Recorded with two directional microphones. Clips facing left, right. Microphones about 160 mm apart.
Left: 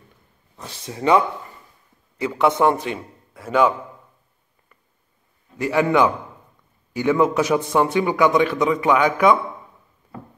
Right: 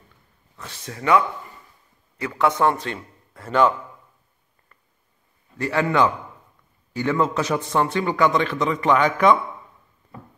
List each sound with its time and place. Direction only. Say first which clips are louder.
0.6 s a man's voice: left 4 dB; 15° left (ahead or behind)
5.6 s a man's voice: left 2 dB; 15° left (ahead or behind)